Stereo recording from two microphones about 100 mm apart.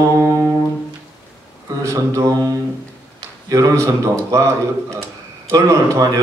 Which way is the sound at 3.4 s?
35° right (ahead or behind).